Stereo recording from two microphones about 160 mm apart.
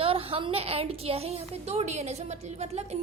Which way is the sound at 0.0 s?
35° right (ahead or behind).